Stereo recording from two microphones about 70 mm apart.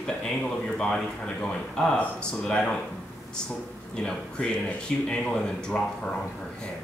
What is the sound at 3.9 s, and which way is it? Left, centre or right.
Speech, centre.